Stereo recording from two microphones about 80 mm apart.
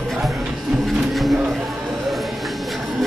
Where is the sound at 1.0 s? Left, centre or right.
Centre.